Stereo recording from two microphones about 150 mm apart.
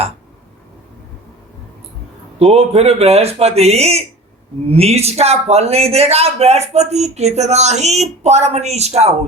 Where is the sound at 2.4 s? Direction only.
45° right (ahead or behind).